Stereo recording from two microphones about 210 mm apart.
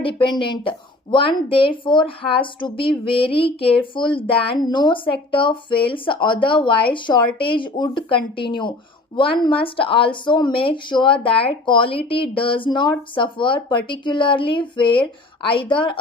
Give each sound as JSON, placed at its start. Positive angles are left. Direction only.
{"t": 0.0, "sound": "a woman's voice", "side_deg": 25}